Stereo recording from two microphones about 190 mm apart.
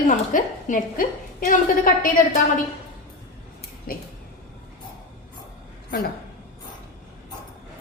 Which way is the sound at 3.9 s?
50° left (ahead or behind).